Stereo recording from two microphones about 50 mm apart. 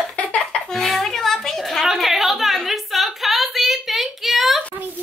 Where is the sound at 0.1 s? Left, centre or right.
Left.